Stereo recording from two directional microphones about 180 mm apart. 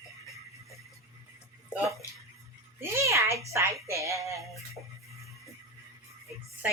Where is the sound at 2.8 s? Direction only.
15° right (ahead or behind).